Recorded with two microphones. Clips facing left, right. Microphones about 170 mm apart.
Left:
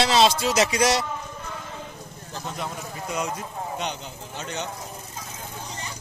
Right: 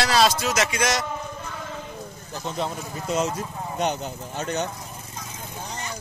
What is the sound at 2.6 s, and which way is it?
Speech, 25° right (ahead or behind).